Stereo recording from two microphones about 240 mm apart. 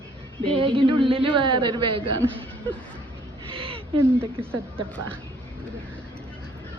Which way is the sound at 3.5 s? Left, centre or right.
Right.